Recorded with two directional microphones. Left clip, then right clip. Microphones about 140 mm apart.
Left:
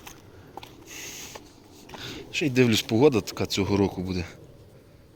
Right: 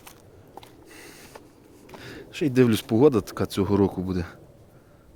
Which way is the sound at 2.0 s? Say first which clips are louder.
Left 1 dB; 70° right (ahead or behind).